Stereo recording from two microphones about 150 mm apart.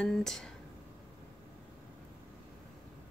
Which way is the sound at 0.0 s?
5° left (ahead or behind).